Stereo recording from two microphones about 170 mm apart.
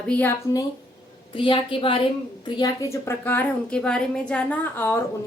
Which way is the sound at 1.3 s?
30° left (ahead or behind).